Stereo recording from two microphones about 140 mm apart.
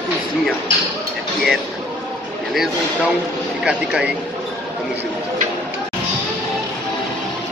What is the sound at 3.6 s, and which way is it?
Speech, 5° right (ahead or behind).